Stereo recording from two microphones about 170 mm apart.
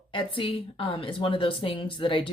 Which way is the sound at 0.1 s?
30° left (ahead or behind).